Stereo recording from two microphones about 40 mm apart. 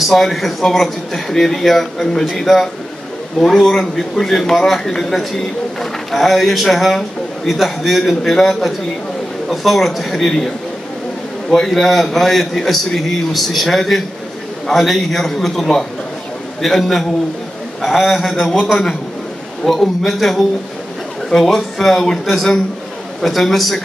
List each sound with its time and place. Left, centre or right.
0.0 s a man's voice: centre
11.5 s a man's voice: centre